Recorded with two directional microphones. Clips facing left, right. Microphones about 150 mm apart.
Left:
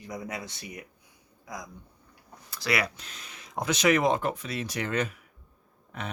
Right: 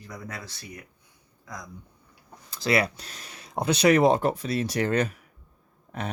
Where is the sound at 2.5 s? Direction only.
25° right (ahead or behind).